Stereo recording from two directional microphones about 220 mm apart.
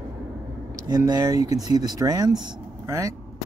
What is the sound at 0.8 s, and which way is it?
Speech, 15° right (ahead or behind).